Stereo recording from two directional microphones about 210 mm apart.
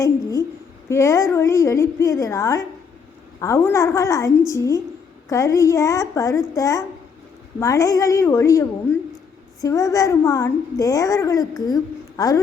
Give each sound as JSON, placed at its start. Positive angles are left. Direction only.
{"t": 0.0, "sound": "a woman's voice", "side_deg": 15}